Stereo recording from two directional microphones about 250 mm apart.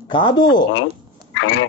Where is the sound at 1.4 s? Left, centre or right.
Left.